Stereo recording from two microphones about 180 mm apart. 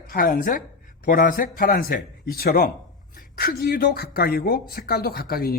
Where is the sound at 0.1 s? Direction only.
50° left (ahead or behind).